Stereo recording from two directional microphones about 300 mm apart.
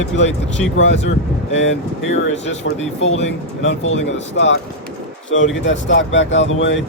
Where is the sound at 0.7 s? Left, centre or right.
Left.